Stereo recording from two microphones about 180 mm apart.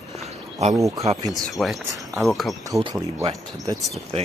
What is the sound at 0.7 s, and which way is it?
Speech, 15° right (ahead or behind).